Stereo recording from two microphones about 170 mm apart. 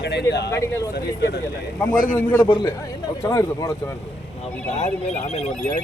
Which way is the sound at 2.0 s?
50° left (ahead or behind).